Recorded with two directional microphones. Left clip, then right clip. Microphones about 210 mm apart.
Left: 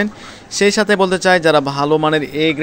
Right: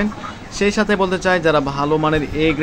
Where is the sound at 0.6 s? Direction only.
35° left (ahead or behind).